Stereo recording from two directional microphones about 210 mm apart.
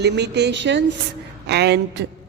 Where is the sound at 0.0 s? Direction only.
55° right (ahead or behind).